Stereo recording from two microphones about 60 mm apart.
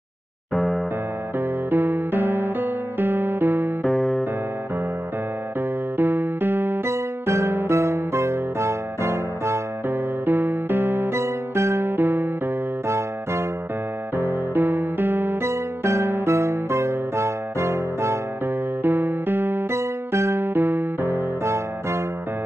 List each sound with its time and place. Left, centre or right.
1.7 s music: right
3.8 s music: centre
5.9 s music: right
9.8 s music: right
12.8 s music: right
14.1 s music: right
18.8 s music: right